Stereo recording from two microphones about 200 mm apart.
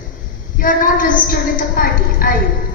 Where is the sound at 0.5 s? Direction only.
40° left (ahead or behind).